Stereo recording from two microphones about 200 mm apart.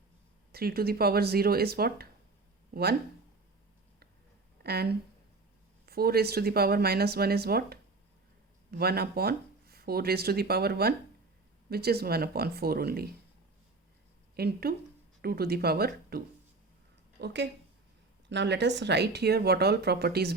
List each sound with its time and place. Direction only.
0.5 s speech: 50° right (ahead or behind)
4.6 s speech: 55° right (ahead or behind)
14.3 s speech: 50° right (ahead or behind)